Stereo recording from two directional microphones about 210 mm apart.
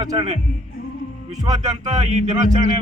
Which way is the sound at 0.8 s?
45° left (ahead or behind).